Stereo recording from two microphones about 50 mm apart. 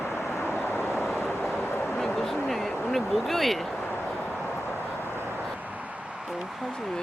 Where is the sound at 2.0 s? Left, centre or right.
Centre.